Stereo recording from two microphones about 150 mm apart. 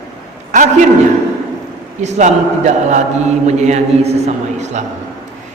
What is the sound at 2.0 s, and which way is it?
A man's voice, 50° right (ahead or behind).